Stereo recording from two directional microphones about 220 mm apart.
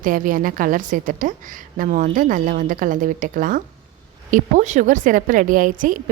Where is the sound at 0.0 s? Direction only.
40° right (ahead or behind).